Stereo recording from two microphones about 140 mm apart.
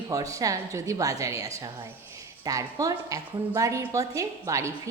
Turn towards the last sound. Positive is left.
turn(degrees=-20)  # may be behind; listen again after turning